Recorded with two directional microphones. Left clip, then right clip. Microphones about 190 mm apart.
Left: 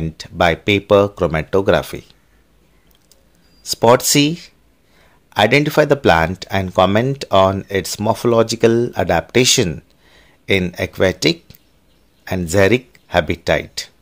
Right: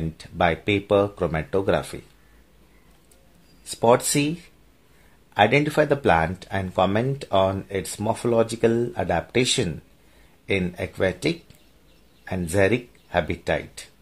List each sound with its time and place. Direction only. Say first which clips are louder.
0.2 s speech: left 7 dB; 20° left (ahead or behind)
3.6 s speech: left 7 dB; 25° left (ahead or behind)